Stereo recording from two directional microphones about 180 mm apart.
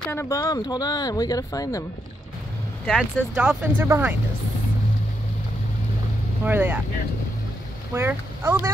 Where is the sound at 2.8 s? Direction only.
5° right (ahead or behind).